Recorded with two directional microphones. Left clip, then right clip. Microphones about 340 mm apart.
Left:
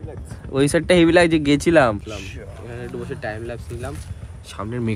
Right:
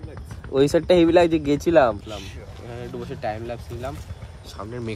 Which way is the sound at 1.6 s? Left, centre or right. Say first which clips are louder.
Even; left.